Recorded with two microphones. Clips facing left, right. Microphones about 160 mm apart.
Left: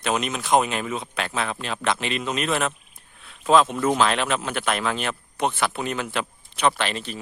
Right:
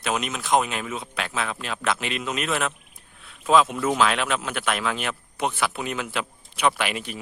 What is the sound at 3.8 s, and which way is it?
Speech, centre (ahead or behind).